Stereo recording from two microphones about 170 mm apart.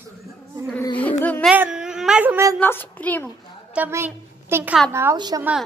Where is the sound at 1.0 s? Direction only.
10° left (ahead or behind).